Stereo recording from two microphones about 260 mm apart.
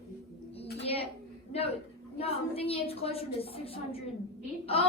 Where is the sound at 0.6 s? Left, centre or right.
Left.